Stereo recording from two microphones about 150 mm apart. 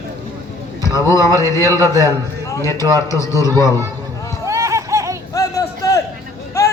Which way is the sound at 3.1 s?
20° left (ahead or behind).